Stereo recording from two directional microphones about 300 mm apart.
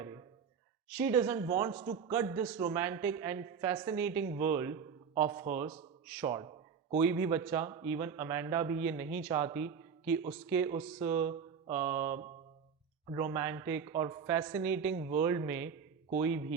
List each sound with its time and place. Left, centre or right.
0.9 s a man's voice: centre
5.1 s a man's voice: right
6.1 s a man's voice: centre